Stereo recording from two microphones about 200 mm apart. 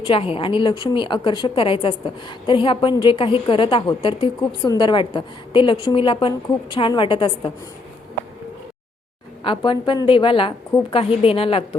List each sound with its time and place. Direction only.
0.0 s a woman's voice: 25° left (ahead or behind)
9.4 s a woman's voice: 25° left (ahead or behind)